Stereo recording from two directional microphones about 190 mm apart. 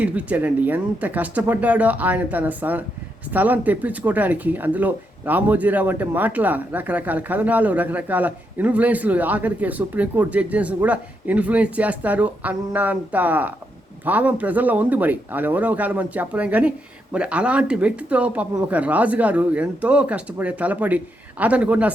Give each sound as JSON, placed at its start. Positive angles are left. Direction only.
{"t": 0.0, "sound": "speech", "side_deg": -10}